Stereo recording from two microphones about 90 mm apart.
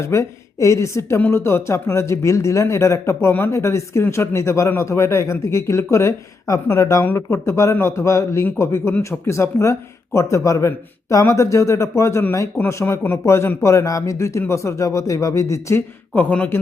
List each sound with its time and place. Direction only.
0.0 s speech: 35° left (ahead or behind)
16.1 s a man's voice: 20° left (ahead or behind)